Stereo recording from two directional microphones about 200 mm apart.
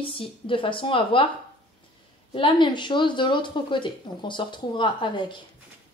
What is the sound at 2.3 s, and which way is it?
Speech, 25° left (ahead or behind).